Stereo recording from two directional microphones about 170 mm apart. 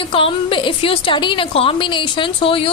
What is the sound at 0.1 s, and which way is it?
A woman's voice, 30° left (ahead or behind).